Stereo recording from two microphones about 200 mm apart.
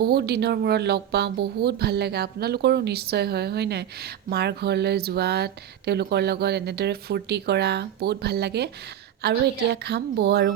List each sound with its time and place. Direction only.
0.0 s speech: 50° right (ahead or behind)